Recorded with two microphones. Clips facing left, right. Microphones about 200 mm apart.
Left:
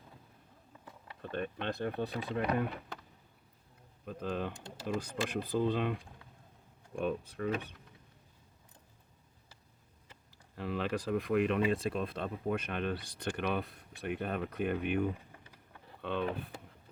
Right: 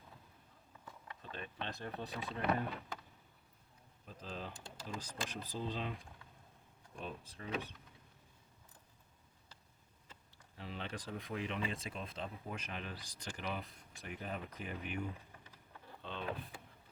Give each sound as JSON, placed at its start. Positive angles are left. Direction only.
{"t": 1.2, "sound": "speech", "side_deg": 60}
{"t": 4.0, "sound": "speech", "side_deg": 60}
{"t": 10.5, "sound": "speech", "side_deg": 65}